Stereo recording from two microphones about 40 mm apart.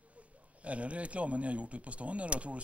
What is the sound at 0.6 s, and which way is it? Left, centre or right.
Speech, right.